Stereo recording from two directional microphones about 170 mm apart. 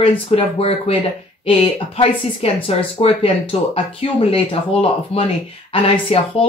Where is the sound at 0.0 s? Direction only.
35° left (ahead or behind).